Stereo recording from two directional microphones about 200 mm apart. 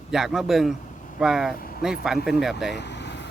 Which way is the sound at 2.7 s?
60° left (ahead or behind).